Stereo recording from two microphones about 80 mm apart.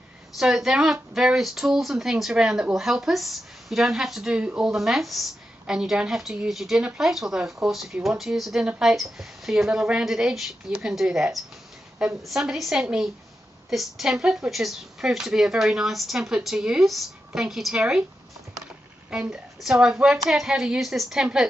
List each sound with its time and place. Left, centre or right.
0.4 s speech: centre
19.0 s a woman's voice: centre